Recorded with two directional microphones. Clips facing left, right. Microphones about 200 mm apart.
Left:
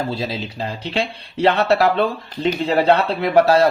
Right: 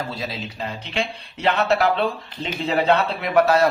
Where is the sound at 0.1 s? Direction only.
30° left (ahead or behind).